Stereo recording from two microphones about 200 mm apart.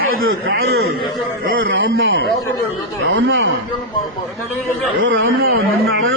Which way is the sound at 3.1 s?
65° right (ahead or behind).